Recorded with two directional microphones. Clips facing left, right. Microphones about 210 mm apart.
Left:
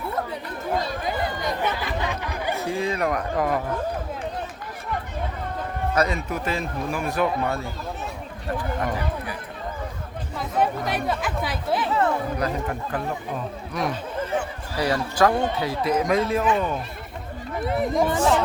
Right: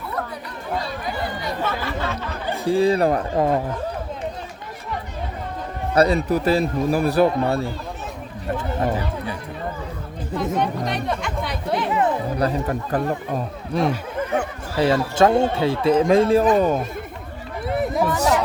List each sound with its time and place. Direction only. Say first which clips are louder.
1.0 s chatter: left 1 dB; 20° left (ahead or behind)
2.6 s speech: right 9 dB; 35° right (ahead or behind)
5.9 s speech: right 8 dB; 35° right (ahead or behind)
10.3 s speech: right 2 dB; 5° left (ahead or behind)
11.9 s speech: right 3 dB; 15° right (ahead or behind)
12.4 s speech: right 4 dB; 35° right (ahead or behind)
17.7 s chatter: right 1 dB; centre (ahead or behind)